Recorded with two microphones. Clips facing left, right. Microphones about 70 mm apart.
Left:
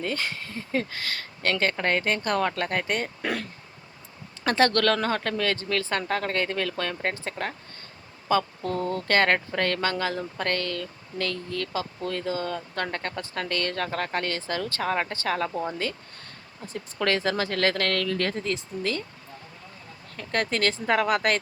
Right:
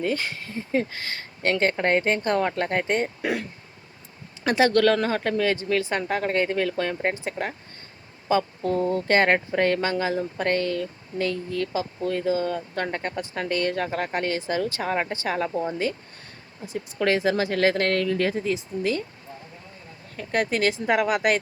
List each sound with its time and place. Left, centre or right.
0.0 s speech: centre
3.2 s speech: centre
16.7 s speech: centre
20.1 s speech: centre